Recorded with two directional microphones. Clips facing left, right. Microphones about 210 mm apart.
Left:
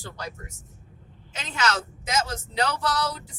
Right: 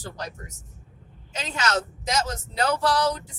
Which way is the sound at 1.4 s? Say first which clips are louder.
Right 1 dB; 45° right (ahead or behind).